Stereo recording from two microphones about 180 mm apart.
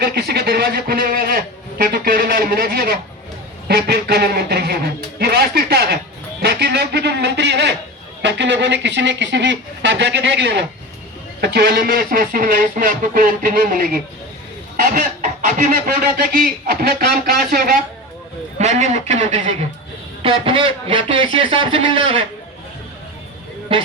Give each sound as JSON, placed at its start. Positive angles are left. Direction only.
{"t": 0.0, "sound": "speech", "side_deg": -60}
{"t": 5.2, "sound": "a sound", "side_deg": -60}
{"t": 8.2, "sound": "speech", "side_deg": -80}
{"t": 11.3, "sound": "speech", "side_deg": -60}
{"t": 18.5, "sound": "a man's voice", "side_deg": -40}
{"t": 20.2, "sound": "a man's voice", "side_deg": -30}